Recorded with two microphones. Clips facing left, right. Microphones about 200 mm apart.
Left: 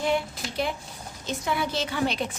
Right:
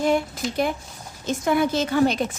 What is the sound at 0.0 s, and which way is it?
A woman's voice, 45° right (ahead or behind).